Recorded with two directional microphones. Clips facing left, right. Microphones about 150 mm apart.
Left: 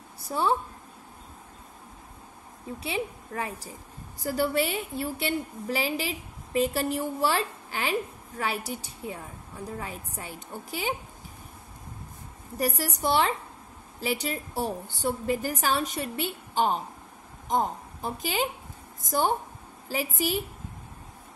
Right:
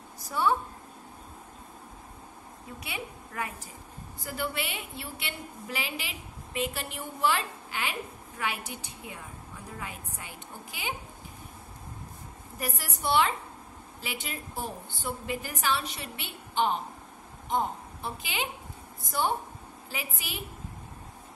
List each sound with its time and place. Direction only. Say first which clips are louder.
0.2 s a woman's voice: left 1 dB; 30° left (ahead or behind)
2.8 s a woman's voice: left 8 dB; 30° left (ahead or behind)
4.2 s a woman's voice: left 8 dB; 40° left (ahead or behind)
12.5 s a woman's voice: left 8 dB; 40° left (ahead or behind)